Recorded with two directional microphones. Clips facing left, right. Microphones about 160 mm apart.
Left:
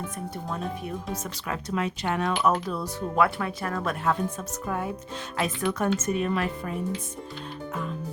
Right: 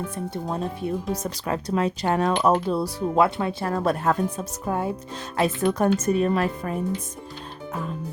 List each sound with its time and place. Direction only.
0.4 s speech: 30° right (ahead or behind)